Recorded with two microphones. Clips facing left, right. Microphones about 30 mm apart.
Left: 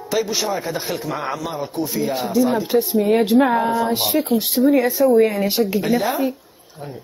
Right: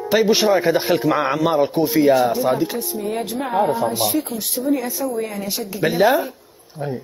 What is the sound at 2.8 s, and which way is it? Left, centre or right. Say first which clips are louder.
Speech: left 8 dB; left.